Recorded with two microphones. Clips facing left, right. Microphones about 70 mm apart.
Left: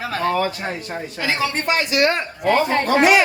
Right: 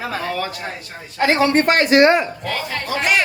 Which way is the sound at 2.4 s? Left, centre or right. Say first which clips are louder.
Left 8 dB; left.